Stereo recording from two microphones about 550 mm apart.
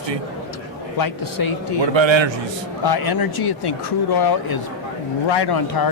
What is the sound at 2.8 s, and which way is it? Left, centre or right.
Speech, left.